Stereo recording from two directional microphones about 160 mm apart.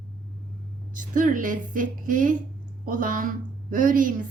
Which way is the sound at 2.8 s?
60° right (ahead or behind).